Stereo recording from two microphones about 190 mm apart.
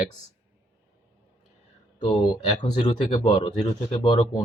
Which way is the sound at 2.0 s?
30° left (ahead or behind).